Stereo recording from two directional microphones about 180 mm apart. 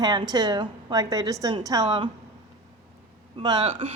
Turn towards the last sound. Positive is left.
turn(degrees=-30)  # may be behind; listen again after turning